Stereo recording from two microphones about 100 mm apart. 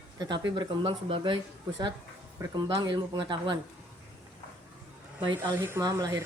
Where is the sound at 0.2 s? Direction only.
50° right (ahead or behind).